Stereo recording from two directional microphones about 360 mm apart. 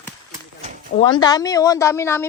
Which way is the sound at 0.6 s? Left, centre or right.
Centre.